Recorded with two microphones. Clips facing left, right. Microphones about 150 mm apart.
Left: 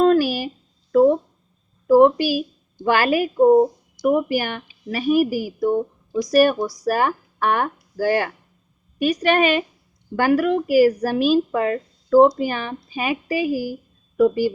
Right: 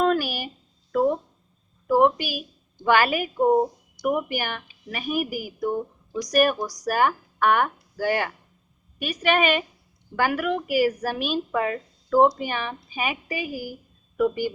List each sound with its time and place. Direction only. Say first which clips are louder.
0.0 s a sound: left 6 dB; 35° left (ahead or behind)
2.0 s a woman's voice: left 6 dB; 40° left (ahead or behind)
3.3 s speech: left 6 dB; centre (ahead or behind)
4.0 s a woman's voice: left 6 dB; 35° left (ahead or behind)